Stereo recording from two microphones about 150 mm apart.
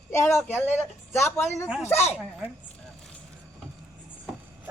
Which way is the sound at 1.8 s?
45° left (ahead or behind).